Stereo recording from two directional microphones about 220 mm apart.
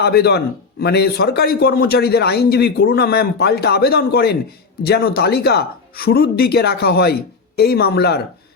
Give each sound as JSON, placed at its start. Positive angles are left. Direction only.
{"t": 0.0, "sound": "a man's voice", "side_deg": 45}